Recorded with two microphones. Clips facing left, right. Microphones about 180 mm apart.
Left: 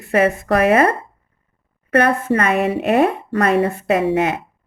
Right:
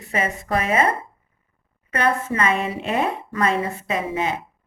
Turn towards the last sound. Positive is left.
turn(degrees=65)  # may be behind; listen again after turning